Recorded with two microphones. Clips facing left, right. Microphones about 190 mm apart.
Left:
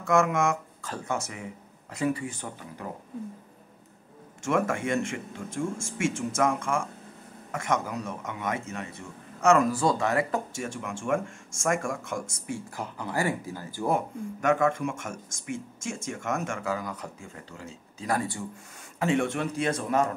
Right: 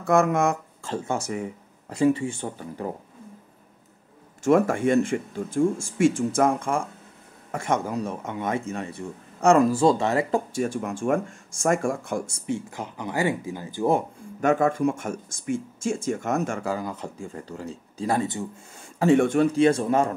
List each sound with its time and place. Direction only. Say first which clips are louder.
0.0 s a man's voice: right 3 dB; 35° right (ahead or behind)
4.4 s a man's voice: right 7 dB; 35° right (ahead or behind)
12.6 s speech: right 2 dB; 20° right (ahead or behind)
13.9 s a man's voice: right 3 dB; 35° right (ahead or behind)
18.9 s a man's voice: right 7 dB; 40° right (ahead or behind)
19.5 s speech: right 7 dB; 30° right (ahead or behind)